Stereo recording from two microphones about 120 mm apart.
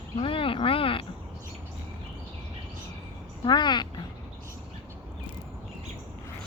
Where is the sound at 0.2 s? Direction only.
50° left (ahead or behind).